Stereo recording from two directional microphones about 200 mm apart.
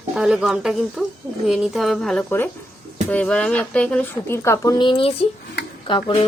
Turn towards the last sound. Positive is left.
turn(degrees=25)  # may be behind; listen again after turning